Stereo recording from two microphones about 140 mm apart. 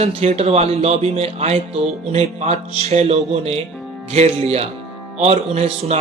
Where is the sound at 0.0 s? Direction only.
45° right (ahead or behind).